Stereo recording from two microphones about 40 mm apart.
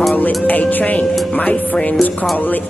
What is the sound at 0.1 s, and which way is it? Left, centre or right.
Music, left.